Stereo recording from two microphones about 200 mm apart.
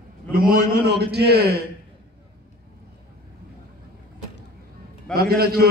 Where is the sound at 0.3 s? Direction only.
45° right (ahead or behind).